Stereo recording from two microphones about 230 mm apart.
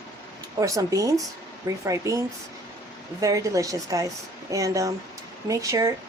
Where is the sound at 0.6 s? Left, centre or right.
Centre.